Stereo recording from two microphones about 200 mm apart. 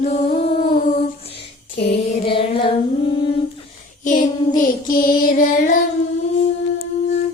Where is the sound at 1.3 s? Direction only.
55° left (ahead or behind).